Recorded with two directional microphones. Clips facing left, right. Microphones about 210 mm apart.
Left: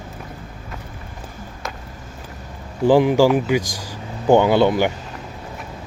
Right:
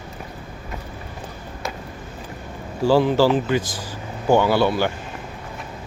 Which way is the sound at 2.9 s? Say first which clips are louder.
Left 3 dB; 15° left (ahead or behind).